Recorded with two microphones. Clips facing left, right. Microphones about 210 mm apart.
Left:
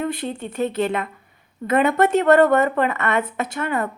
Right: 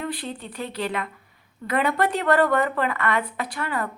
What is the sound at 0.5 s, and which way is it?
A woman's voice, 25° left (ahead or behind).